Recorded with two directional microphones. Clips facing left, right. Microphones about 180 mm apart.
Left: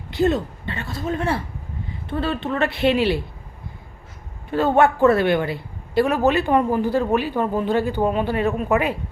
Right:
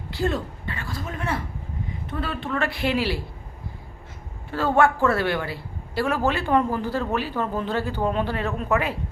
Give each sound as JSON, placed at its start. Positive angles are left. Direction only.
{"t": 0.1, "sound": "a woman's voice", "side_deg": 20}
{"t": 4.5, "sound": "a man's voice", "side_deg": 20}